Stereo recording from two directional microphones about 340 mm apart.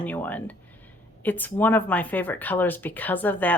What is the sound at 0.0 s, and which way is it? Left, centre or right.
A woman's voice, centre.